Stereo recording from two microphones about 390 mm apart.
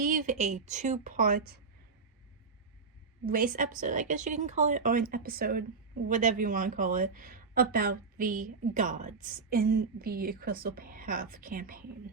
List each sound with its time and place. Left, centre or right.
0.0 s a woman's voice: centre
3.2 s a woman's voice: right